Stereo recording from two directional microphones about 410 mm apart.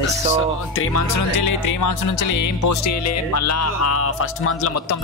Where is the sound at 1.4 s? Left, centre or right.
Left.